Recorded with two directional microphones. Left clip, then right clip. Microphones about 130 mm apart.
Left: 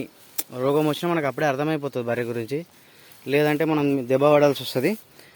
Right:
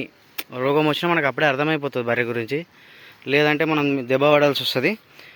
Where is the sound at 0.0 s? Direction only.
15° left (ahead or behind).